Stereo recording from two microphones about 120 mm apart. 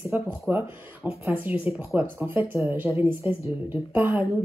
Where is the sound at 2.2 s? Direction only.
15° right (ahead or behind).